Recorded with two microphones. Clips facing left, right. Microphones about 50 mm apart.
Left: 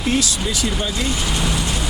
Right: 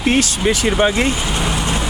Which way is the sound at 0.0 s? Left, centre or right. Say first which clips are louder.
Right 5 dB; right.